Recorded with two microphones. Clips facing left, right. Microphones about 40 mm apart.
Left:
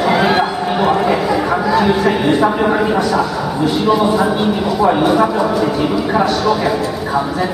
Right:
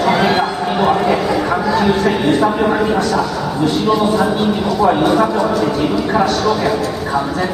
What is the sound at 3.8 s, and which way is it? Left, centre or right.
Speech, centre.